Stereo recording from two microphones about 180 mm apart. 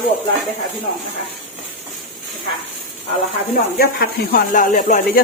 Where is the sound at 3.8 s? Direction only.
55° left (ahead or behind).